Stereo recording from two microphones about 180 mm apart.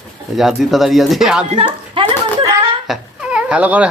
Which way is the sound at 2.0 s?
30° right (ahead or behind).